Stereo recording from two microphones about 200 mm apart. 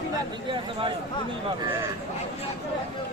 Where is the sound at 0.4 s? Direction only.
25° right (ahead or behind).